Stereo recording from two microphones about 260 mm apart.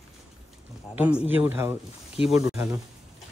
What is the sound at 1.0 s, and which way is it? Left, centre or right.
Speech, centre.